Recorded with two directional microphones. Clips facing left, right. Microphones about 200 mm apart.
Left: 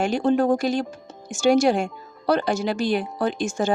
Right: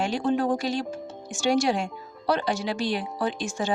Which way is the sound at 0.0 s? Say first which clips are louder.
Left 5 dB; 45° left (ahead or behind).